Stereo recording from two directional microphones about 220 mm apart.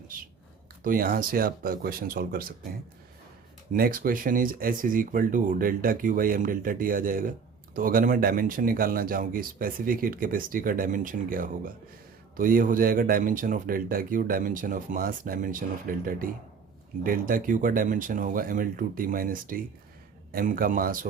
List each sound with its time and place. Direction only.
0.9 s speech: 40° right (ahead or behind)
3.7 s speech: 40° right (ahead or behind)